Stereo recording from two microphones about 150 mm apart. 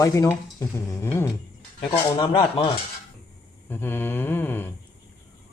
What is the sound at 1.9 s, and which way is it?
Speech, 35° left (ahead or behind).